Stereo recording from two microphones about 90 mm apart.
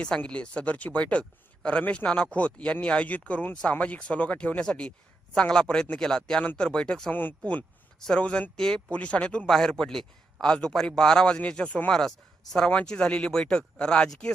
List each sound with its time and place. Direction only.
0.0 s speech: 15° left (ahead or behind)
7.1 s speech: 20° left (ahead or behind)